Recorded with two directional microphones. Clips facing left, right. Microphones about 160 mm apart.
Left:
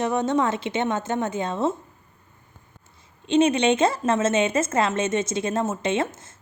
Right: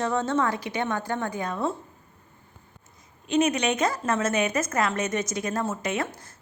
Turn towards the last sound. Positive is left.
turn(degrees=25)  # may be behind; listen again after turning